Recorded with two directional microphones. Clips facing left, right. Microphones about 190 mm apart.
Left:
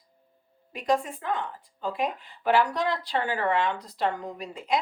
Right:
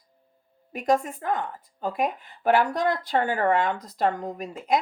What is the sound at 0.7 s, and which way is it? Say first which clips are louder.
Speech: right 3 dB; 45° right (ahead or behind).